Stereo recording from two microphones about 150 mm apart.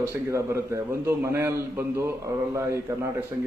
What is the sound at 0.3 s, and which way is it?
A man's voice, 20° right (ahead or behind).